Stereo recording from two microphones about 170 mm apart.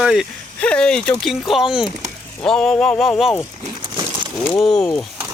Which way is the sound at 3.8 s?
30° right (ahead or behind).